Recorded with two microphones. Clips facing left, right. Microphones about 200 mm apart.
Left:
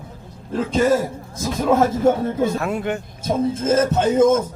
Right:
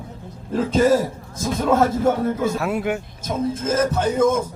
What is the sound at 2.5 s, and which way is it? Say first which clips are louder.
Speech: even; 5° right (ahead or behind).